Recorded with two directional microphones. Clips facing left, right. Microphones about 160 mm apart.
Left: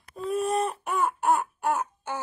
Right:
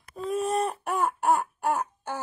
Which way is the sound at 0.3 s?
10° left (ahead or behind).